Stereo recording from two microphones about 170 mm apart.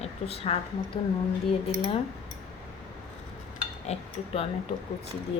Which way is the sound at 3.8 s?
35° left (ahead or behind).